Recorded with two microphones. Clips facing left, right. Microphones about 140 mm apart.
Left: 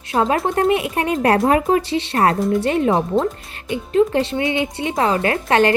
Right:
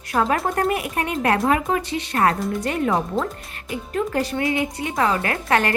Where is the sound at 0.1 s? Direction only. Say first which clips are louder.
Left 3 dB; 25° left (ahead or behind).